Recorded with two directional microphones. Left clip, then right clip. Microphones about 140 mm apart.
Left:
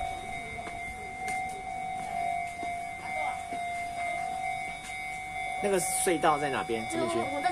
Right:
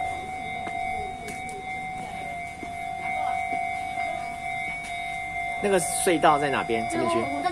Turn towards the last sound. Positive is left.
turn(degrees=20)  # may be behind; listen again after turning